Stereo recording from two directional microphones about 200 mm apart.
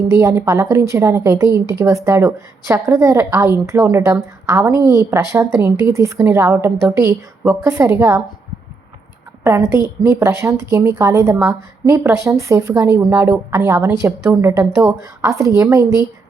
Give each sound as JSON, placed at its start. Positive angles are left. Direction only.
{"t": 0.2, "sound": "a woman's voice", "side_deg": -15}
{"t": 9.4, "sound": "a woman's voice", "side_deg": -15}